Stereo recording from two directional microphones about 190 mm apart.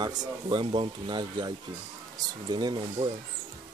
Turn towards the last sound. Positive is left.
turn(degrees=-25)  # may be behind; listen again after turning